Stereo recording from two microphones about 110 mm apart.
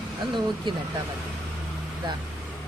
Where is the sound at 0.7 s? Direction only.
45° right (ahead or behind).